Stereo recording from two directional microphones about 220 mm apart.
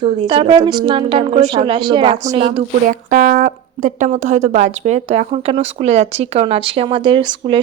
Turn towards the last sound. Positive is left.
turn(degrees=-25)  # may be behind; listen again after turning